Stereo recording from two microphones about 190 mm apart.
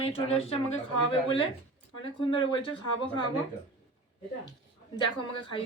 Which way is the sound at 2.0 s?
25° left (ahead or behind).